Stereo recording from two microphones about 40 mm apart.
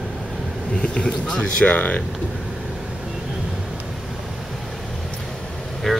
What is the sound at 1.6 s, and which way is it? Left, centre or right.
Speech, left.